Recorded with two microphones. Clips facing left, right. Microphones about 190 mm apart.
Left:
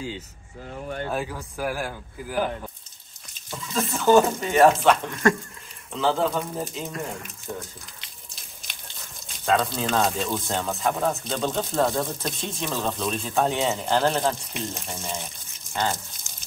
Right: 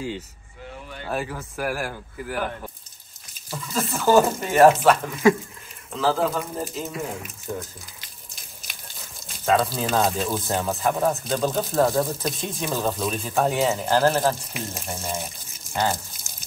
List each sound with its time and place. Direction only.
1.0 s speech: centre (ahead or behind)
8.6 s speech: 5° right (ahead or behind)